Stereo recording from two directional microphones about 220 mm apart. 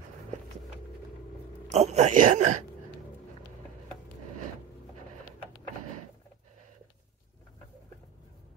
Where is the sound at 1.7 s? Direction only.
30° right (ahead or behind).